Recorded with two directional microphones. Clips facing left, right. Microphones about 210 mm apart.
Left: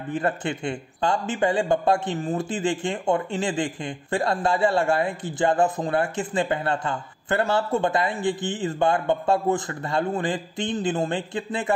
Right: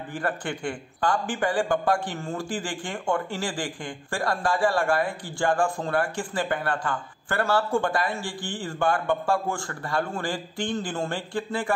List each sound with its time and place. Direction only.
0.1 s speech: 25° left (ahead or behind)